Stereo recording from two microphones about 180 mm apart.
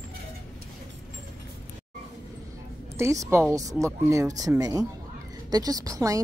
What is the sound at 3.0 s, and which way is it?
A woman's voice, 15° right (ahead or behind).